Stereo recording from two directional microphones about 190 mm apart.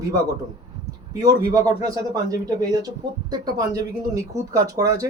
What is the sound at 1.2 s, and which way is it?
Speech, 20° right (ahead or behind).